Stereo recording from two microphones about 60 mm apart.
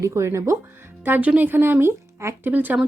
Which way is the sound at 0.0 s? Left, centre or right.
Right.